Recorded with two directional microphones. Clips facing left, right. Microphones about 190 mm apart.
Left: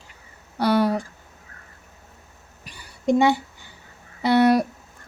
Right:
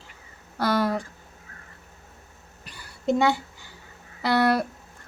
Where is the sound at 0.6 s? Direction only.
15° left (ahead or behind).